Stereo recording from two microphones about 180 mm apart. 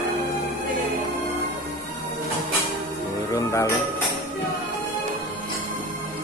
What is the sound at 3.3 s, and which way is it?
Music, 15° left (ahead or behind).